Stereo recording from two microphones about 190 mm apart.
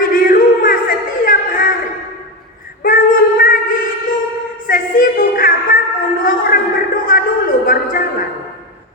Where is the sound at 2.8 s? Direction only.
45° left (ahead or behind).